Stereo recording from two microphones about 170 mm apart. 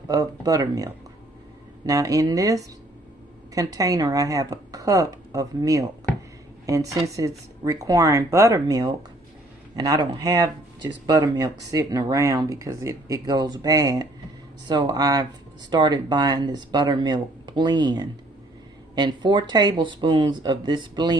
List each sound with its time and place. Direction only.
0.1 s speech: 20° right (ahead or behind)
1.9 s speech: 20° right (ahead or behind)